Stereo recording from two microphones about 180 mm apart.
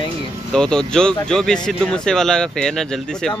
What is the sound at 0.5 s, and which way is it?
Speech, 5° left (ahead or behind).